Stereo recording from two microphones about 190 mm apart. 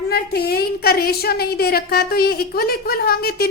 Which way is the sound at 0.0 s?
55° left (ahead or behind).